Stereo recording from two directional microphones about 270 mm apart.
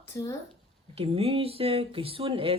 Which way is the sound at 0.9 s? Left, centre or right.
Right.